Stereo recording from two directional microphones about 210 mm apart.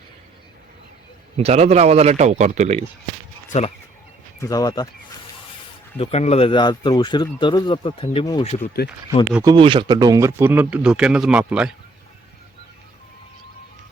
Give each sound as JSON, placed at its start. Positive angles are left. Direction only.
{"t": 1.4, "sound": "speech", "side_deg": -30}
{"t": 3.5, "sound": "speech", "side_deg": 35}
{"t": 4.4, "sound": "speech", "side_deg": 15}
{"t": 6.0, "sound": "speech", "side_deg": 30}
{"t": 9.3, "sound": "speech", "side_deg": -15}